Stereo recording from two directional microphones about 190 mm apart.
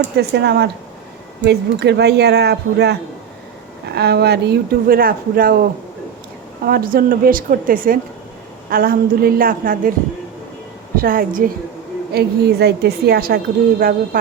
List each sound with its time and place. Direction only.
0.2 s a woman's voice: 60° right (ahead or behind)
6.7 s a woman's voice: 50° right (ahead or behind)
10.9 s a woman's voice: 50° right (ahead or behind)